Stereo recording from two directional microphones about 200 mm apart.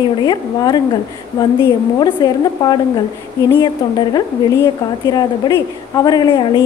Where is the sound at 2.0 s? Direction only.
20° left (ahead or behind).